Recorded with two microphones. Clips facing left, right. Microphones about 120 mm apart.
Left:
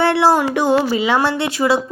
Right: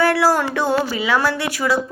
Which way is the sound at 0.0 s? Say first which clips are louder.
Left 2 dB; 25° left (ahead or behind).